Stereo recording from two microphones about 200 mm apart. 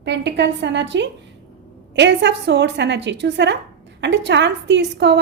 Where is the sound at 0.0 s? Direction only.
60° right (ahead or behind).